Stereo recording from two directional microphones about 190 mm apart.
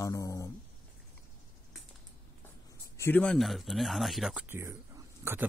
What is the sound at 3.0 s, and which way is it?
Speech, 10° left (ahead or behind).